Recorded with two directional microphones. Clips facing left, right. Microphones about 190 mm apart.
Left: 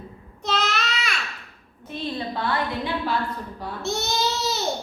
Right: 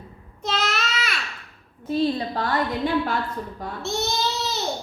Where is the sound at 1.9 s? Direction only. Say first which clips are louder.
Right 7 dB; 40° right (ahead or behind).